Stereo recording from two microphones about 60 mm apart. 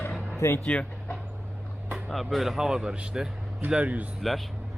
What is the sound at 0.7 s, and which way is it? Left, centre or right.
Speech, left.